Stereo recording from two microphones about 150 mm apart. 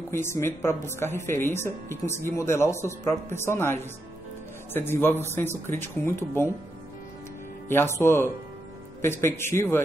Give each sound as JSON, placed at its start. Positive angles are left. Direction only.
{"t": 0.1, "sound": "a woman's voice", "side_deg": 15}
{"t": 7.6, "sound": "a woman's voice", "side_deg": 15}